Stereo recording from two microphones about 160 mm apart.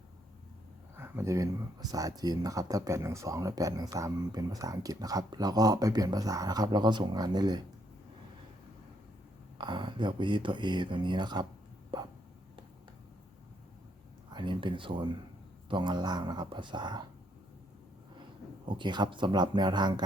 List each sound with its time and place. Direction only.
0.9 s speech: 15° right (ahead or behind)
9.6 s speech: 30° right (ahead or behind)
11.9 s hiccup: 30° right (ahead or behind)
14.3 s speech: 30° right (ahead or behind)
18.7 s speech: 30° right (ahead or behind)